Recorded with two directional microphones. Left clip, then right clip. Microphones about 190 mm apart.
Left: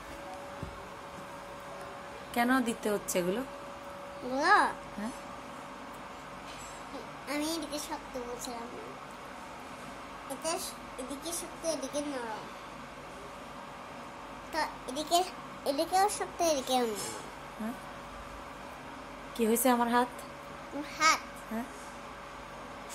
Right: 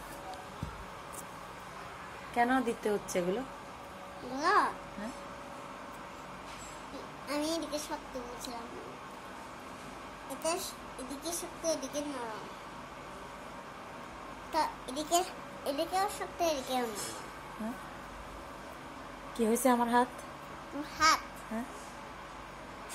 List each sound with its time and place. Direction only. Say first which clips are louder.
2.3 s a woman's voice: even; 20° left (ahead or behind)
4.4 s a child's voice: left 3 dB; 40° left (ahead or behind)
7.2 s a woman's voice: right 1 dB; 25° left (ahead or behind)
10.4 s a woman's voice: right 2 dB; 25° left (ahead or behind)
14.5 s a child's voice: right 2 dB; 10° left (ahead or behind)
15.7 s a child's voice: left 4 dB; 30° left (ahead or behind)
19.3 s a woman's voice: left 1 dB; centre (ahead or behind)
21.0 s a woman's voice: even; 20° left (ahead or behind)